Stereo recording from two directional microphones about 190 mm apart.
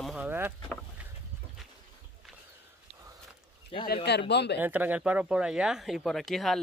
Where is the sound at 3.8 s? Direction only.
60° left (ahead or behind).